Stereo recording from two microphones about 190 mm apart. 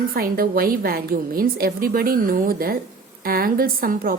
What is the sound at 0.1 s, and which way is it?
A woman's voice, 50° right (ahead or behind).